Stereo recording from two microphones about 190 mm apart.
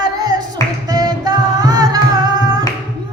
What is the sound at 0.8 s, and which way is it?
Humming, 20° right (ahead or behind).